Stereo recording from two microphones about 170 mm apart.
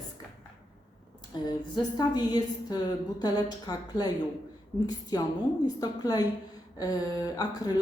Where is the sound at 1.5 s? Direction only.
25° left (ahead or behind).